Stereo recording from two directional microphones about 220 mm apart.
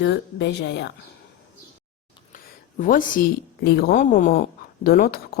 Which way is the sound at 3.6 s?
45° left (ahead or behind).